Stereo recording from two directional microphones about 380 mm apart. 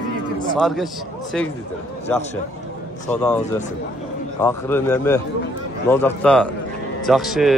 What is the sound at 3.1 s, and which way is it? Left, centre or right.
Speech, centre.